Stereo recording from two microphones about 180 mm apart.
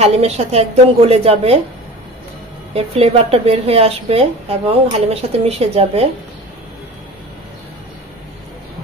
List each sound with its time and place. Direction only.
0.0 s a woman's voice: 35° right (ahead or behind)
2.7 s a woman's voice: 35° right (ahead or behind)